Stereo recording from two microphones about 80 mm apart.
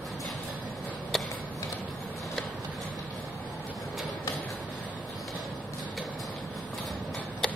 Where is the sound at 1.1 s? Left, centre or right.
Centre.